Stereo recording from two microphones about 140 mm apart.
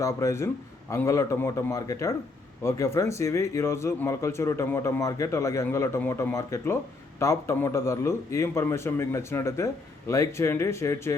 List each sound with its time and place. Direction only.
0.0 s a man's voice: 20° left (ahead or behind)